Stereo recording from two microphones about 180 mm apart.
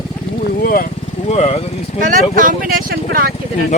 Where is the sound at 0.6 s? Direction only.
55° left (ahead or behind).